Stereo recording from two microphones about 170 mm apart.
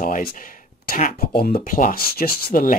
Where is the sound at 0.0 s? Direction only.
55° left (ahead or behind).